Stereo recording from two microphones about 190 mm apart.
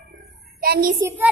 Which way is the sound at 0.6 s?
55° right (ahead or behind).